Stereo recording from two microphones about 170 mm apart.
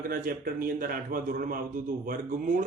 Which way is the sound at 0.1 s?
60° right (ahead or behind).